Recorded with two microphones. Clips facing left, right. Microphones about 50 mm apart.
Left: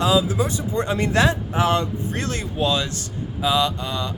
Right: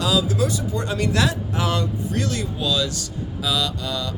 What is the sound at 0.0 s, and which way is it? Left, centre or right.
Speech, left.